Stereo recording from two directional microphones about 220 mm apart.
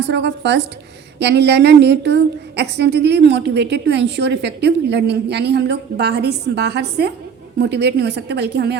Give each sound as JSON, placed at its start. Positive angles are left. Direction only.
{"t": 0.1, "sound": "a woman's voice", "side_deg": -50}